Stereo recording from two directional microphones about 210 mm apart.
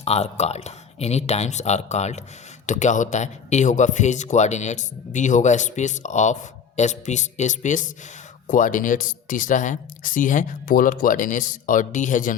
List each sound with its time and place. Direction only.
0.0 s speech: 30° left (ahead or behind)